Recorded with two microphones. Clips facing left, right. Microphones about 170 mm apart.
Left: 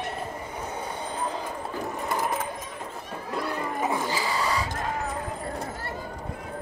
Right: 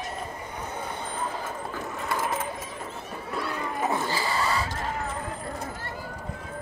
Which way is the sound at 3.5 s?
10° left (ahead or behind).